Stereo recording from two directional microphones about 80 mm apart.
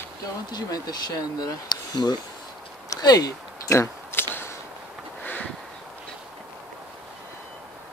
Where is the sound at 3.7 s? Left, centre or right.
Left.